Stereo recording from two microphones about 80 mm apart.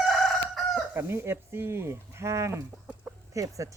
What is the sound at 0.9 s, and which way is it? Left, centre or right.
Speech, right.